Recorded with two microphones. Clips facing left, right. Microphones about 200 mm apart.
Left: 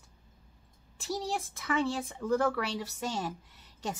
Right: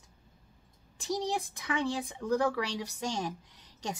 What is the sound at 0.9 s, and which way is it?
A woman's voice, 15° right (ahead or behind).